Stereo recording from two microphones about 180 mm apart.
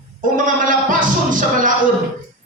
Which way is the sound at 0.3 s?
45° right (ahead or behind).